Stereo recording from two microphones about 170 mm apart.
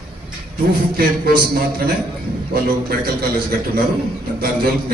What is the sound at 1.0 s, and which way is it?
A man's voice, 65° right (ahead or behind).